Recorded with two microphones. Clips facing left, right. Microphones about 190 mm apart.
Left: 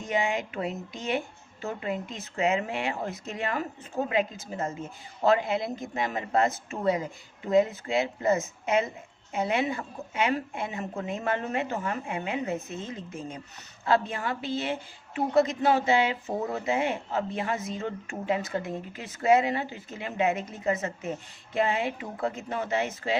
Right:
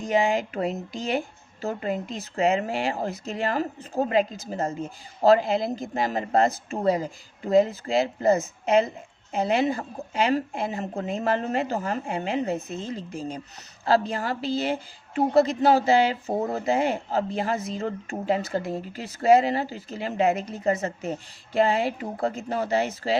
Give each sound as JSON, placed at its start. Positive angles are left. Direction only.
{"t": 0.0, "sound": "a woman's voice", "side_deg": -35}